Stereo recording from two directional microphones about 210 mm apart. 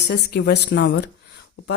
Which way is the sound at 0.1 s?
55° left (ahead or behind).